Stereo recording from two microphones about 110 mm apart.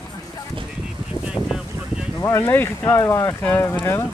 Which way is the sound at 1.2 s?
10° right (ahead or behind).